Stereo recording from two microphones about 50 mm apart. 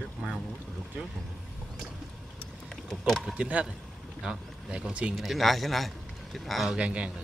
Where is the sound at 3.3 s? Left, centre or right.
Right.